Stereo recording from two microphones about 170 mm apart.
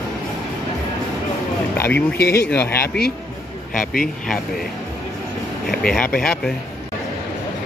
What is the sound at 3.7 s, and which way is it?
Speech, 55° left (ahead or behind).